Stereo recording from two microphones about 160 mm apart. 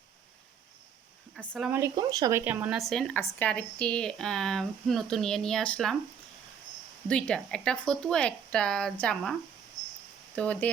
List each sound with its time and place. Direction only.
1.4 s speech: 5° right (ahead or behind)
1.8 s speech: 25° right (ahead or behind)
2.4 s a woman's voice: 10° right (ahead or behind)
7.1 s a woman's voice: 5° left (ahead or behind)
10.3 s speech: 10° left (ahead or behind)